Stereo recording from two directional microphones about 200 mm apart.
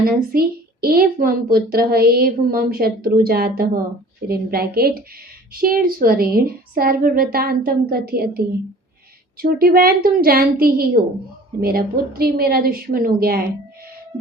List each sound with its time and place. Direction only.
0.0 s a woman's voice: 50° right (ahead or behind)